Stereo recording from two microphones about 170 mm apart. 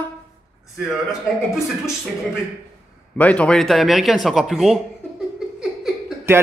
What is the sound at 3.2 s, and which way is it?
A woman's voice, 10° left (ahead or behind).